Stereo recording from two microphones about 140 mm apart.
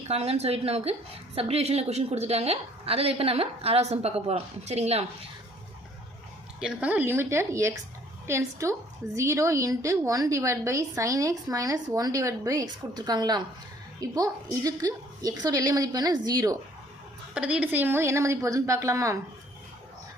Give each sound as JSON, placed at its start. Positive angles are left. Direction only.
{"t": 0.1, "sound": "a woman's voice", "side_deg": -45}
{"t": 6.6, "sound": "a woman's voice", "side_deg": -5}
{"t": 14.6, "sound": "a woman's voice", "side_deg": -25}
{"t": 17.3, "sound": "a woman's voice", "side_deg": -10}